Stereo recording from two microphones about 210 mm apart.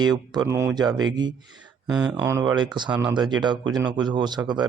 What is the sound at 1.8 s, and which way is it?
Speech, 5° right (ahead or behind).